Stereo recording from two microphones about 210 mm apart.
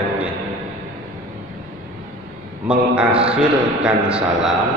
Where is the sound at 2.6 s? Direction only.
5° right (ahead or behind).